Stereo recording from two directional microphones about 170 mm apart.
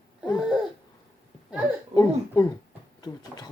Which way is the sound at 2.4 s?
25° left (ahead or behind).